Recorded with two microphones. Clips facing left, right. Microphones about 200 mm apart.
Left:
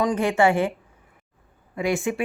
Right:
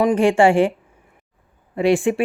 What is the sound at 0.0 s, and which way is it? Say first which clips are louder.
Speech: right 5 dB; 25° right (ahead or behind).